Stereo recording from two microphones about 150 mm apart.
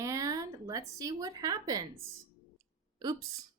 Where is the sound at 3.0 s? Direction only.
25° right (ahead or behind).